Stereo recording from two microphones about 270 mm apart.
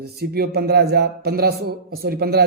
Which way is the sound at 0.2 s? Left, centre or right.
Right.